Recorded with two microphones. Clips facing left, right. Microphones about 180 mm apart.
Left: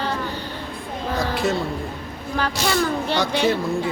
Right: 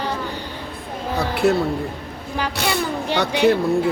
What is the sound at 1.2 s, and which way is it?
Speech, 60° right (ahead or behind).